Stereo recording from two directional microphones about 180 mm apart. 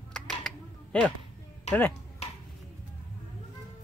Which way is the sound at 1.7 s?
40° left (ahead or behind).